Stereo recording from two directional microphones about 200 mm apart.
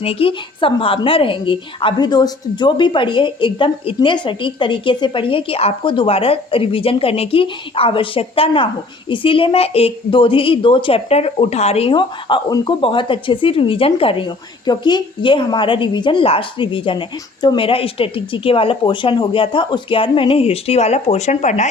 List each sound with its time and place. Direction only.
0.0 s a woman's voice: 30° left (ahead or behind)